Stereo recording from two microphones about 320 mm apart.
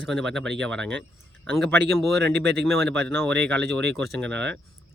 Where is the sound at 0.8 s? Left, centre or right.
Right.